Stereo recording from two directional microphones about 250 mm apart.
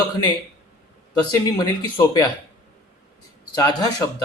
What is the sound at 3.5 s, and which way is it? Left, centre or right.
Speech, centre.